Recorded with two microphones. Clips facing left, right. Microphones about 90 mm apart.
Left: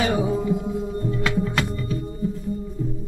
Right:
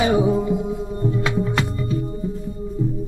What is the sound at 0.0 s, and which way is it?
Music, 15° right (ahead or behind).